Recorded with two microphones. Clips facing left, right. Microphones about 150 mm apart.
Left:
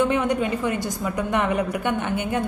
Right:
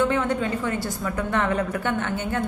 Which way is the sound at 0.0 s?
15° left (ahead or behind).